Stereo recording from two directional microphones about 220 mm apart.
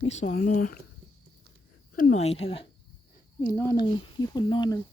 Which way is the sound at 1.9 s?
30° left (ahead or behind).